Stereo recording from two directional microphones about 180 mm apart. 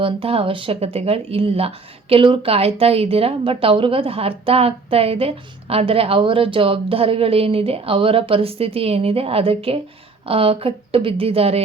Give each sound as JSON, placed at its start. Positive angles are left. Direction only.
{"t": 0.0, "sound": "speech", "side_deg": -30}